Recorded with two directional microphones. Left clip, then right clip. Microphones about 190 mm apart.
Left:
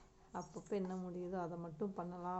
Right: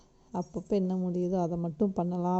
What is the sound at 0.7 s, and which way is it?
Speech, 40° right (ahead or behind).